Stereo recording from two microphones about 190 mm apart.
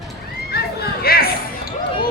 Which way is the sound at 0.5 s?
55° left (ahead or behind).